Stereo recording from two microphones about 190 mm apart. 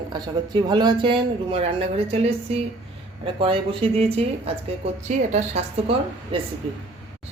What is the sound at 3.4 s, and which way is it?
A woman's voice, 30° right (ahead or behind).